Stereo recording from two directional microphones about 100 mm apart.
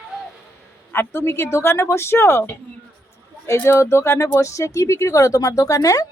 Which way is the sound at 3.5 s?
25° left (ahead or behind).